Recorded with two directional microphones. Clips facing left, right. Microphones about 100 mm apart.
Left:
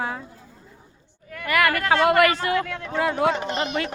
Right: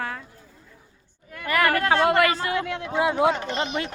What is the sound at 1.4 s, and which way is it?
Speech, 30° right (ahead or behind).